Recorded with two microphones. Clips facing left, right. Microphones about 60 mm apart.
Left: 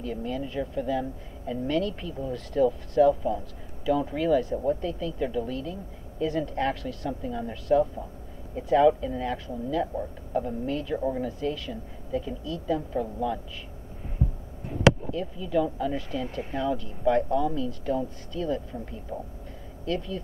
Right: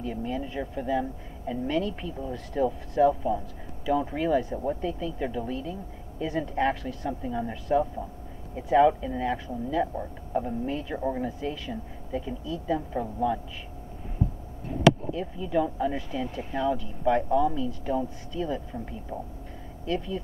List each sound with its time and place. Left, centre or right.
0.0 s speech: centre
15.1 s speech: centre